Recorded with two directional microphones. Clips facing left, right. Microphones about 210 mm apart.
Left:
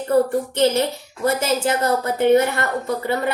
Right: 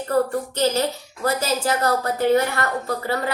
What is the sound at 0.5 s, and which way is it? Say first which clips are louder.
A woman's voice: left 3 dB; 20° left (ahead or behind).